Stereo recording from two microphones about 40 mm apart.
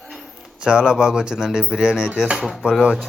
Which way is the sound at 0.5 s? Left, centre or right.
Centre.